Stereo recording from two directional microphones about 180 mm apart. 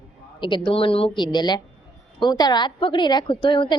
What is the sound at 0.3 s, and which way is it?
A woman's voice, 25° left (ahead or behind).